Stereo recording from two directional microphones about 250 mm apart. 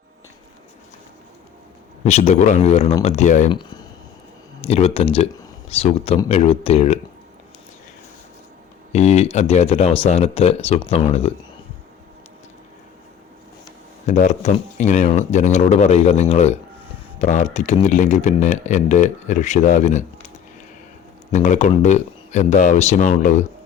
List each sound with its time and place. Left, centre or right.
2.0 s speech: left
3.5 s speech: centre
8.9 s speech: left
14.1 s speech: left
21.3 s speech: left